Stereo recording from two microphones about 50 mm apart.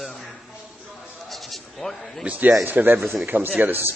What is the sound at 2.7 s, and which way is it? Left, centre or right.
Speech, right.